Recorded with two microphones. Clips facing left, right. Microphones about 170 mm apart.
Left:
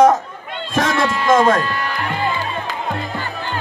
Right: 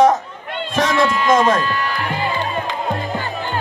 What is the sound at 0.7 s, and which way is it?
A man's voice, 45° left (ahead or behind).